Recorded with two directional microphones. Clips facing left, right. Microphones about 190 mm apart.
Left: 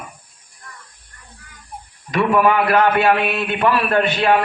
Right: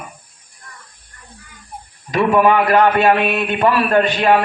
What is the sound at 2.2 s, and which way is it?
A man's voice, 25° right (ahead or behind).